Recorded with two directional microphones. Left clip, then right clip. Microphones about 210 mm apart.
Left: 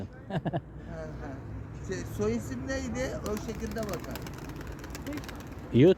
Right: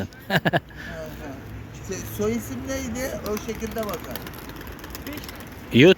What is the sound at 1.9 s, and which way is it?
Speech, 30° right (ahead or behind).